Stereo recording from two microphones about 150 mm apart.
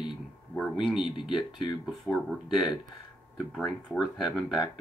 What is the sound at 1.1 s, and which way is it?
Speech, 30° left (ahead or behind).